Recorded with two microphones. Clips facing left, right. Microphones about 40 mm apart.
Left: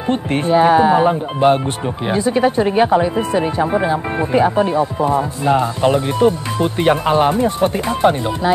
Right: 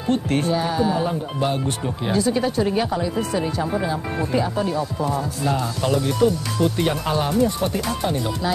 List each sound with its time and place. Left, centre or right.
0.1 s speech: left